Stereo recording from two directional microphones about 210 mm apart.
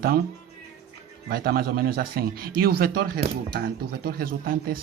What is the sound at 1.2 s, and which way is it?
Speech, 45° right (ahead or behind).